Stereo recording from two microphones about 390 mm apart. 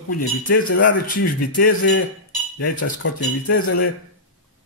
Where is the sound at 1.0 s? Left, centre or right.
Left.